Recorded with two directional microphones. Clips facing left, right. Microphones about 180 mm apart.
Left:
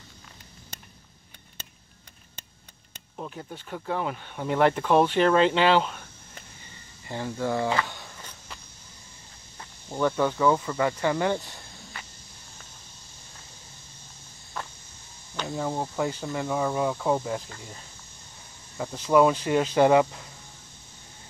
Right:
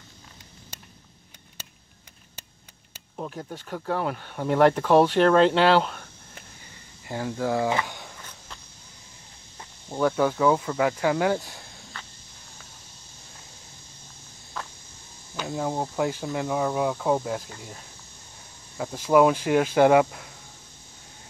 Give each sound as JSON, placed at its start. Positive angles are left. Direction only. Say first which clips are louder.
{"t": 2.9, "sound": "a sound", "louder": "right 3 dB", "side_deg": -5}
{"t": 3.6, "sound": "speech", "louder": "right 2 dB", "side_deg": 0}
{"t": 4.8, "sound": "speech", "louder": "right 3 dB", "side_deg": -10}
{"t": 5.1, "sound": "speech", "louder": "right 2 dB", "side_deg": 5}
{"t": 5.8, "sound": "a sound", "louder": "right 1 dB", "side_deg": -5}
{"t": 7.1, "sound": "speech", "louder": "right 2 dB", "side_deg": -5}
{"t": 7.7, "sound": "speech", "louder": "even", "side_deg": -20}
{"t": 9.6, "sound": "speech", "louder": "right 2 dB", "side_deg": -10}
{"t": 15.3, "sound": "cricket", "louder": "right 1 dB", "side_deg": -5}
{"t": 16.0, "sound": "speech", "louder": "right 3 dB", "side_deg": -10}